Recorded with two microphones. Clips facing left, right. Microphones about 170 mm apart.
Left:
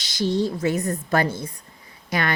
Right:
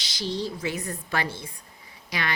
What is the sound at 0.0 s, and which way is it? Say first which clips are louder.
A woman's voice: left 7 dB; 50° left (ahead or behind).